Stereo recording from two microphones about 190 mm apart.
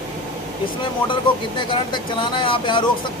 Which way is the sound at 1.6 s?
25° left (ahead or behind).